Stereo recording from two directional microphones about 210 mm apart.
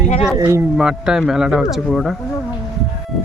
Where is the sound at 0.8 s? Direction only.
5° right (ahead or behind).